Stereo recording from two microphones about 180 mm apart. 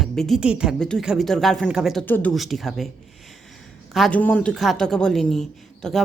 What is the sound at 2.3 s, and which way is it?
Speech, centre (ahead or behind).